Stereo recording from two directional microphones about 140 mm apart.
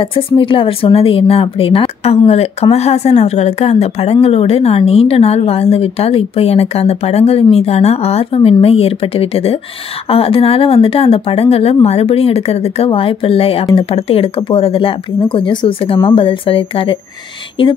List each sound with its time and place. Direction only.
0.4 s a woman's voice: 40° left (ahead or behind)